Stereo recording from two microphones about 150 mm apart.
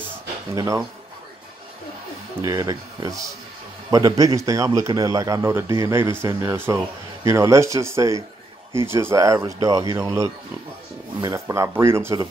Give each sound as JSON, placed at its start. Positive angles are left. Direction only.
{"t": 0.6, "sound": "a man's voice", "side_deg": -25}
{"t": 2.4, "sound": "a man's voice", "side_deg": -25}